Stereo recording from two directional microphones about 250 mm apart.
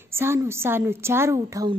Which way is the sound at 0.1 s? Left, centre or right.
Centre.